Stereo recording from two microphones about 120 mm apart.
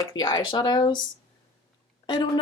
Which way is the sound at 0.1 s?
35° left (ahead or behind).